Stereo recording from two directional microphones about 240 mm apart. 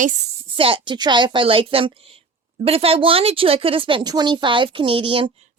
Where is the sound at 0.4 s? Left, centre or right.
Right.